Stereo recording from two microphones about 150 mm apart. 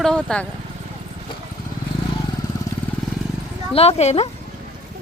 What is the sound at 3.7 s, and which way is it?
Speech, 45° left (ahead or behind).